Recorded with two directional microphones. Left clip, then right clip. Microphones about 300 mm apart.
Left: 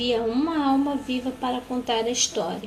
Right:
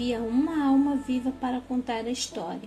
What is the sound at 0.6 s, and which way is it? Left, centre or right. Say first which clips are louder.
A woman's voice: left 1 dB; right.